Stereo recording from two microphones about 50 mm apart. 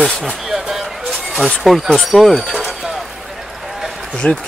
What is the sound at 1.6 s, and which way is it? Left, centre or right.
Speech, centre.